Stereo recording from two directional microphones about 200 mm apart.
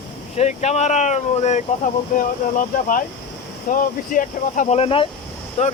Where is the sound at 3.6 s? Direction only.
40° left (ahead or behind).